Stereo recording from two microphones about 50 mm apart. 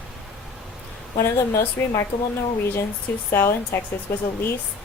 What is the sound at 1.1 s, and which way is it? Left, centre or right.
Speech, left.